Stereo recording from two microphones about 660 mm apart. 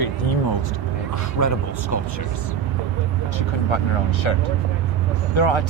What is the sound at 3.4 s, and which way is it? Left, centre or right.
Speech, left.